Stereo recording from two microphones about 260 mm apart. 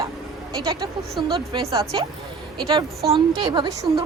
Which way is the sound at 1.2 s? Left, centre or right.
Centre.